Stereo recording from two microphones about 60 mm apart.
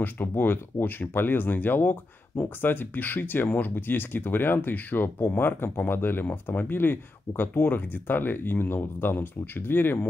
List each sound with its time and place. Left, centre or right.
0.0 s speech: left